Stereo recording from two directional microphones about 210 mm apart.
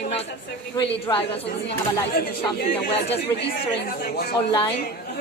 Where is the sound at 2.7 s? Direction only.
30° left (ahead or behind).